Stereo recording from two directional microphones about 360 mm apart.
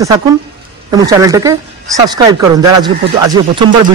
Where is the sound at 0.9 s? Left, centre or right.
Centre.